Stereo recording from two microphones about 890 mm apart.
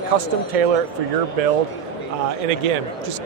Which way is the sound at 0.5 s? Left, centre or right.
Right.